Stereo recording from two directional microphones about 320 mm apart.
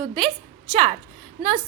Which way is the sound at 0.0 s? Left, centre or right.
Centre.